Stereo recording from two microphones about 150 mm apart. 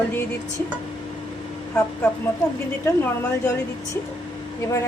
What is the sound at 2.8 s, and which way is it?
Speech, 15° left (ahead or behind).